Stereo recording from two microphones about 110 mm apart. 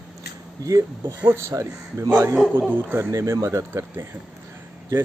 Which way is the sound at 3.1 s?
30° right (ahead or behind).